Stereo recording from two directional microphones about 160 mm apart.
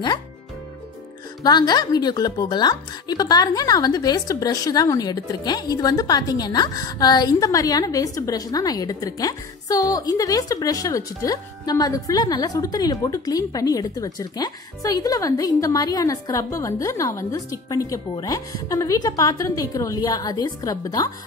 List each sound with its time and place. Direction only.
1.4 s speech: 25° left (ahead or behind)